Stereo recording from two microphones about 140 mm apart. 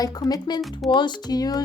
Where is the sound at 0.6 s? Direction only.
Centre (ahead or behind).